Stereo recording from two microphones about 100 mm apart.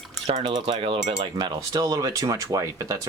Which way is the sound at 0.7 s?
65° right (ahead or behind).